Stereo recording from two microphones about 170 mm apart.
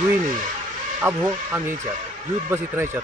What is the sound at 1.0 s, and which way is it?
Speech, 15° right (ahead or behind).